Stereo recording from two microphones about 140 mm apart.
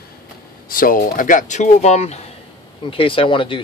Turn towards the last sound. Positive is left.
turn(degrees=35)  # may be behind; listen again after turning